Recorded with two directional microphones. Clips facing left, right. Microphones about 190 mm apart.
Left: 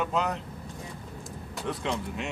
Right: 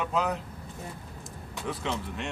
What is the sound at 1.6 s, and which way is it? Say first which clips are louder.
Speech: left 1 dB; centre (ahead or behind).